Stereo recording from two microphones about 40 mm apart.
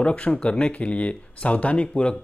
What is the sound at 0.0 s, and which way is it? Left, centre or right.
Speech, left.